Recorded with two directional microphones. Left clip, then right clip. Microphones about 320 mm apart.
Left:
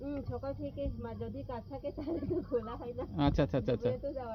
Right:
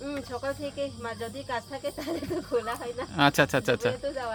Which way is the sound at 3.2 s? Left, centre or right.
Right.